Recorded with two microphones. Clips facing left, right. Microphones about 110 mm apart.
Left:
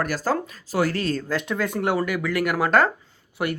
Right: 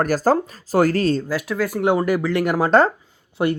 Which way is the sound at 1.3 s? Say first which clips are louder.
Right 2 dB; 5° right (ahead or behind).